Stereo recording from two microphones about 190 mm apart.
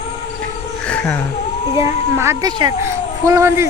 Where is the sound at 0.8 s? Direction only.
5° left (ahead or behind).